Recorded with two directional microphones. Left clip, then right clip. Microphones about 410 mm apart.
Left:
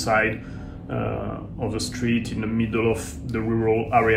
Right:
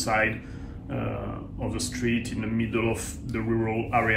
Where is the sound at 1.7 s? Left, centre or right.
Centre.